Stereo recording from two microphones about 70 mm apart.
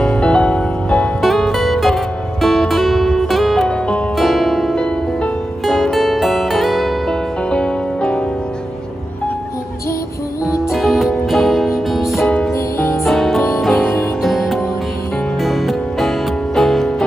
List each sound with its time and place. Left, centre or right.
0.0 s music: centre
1.2 s music: centre
3.6 s music: centre
4.2 s music: centre
5.7 s music: centre
7.4 s music: centre
10.7 s music: centre
12.5 s music: left
13.0 s music: centre